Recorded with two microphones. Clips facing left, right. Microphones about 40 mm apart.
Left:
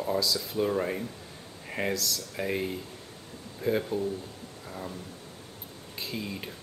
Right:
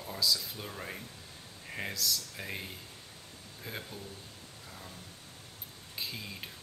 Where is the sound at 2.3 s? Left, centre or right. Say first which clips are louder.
Left 10 dB; centre.